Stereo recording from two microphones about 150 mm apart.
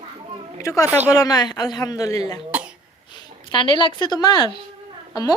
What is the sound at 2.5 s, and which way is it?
Cough, 10° right (ahead or behind).